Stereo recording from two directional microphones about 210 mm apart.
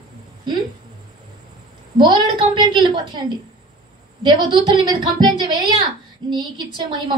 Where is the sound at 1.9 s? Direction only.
20° right (ahead or behind).